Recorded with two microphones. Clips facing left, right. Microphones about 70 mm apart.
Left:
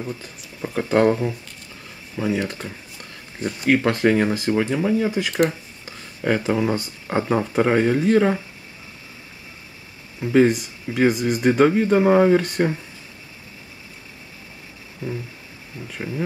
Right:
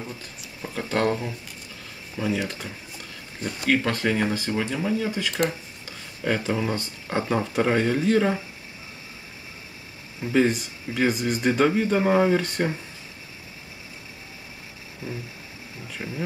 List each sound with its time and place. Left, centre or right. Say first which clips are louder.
0.6 s speech: left 7 dB; centre
3.4 s speech: left 4 dB; centre
10.2 s speech: left 5 dB; centre
16.0 s speech: left 4 dB; left